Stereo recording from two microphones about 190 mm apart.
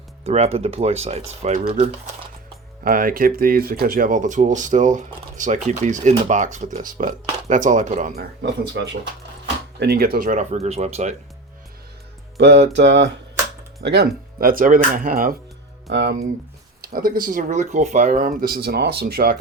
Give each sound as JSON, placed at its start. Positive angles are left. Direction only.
{"t": 0.3, "sound": "speech", "side_deg": -35}
{"t": 2.8, "sound": "speech", "side_deg": -50}
{"t": 8.1, "sound": "speech", "side_deg": -60}
{"t": 12.4, "sound": "speech", "side_deg": -65}
{"t": 15.9, "sound": "speech", "side_deg": -60}
{"t": 16.8, "sound": "speech", "side_deg": -50}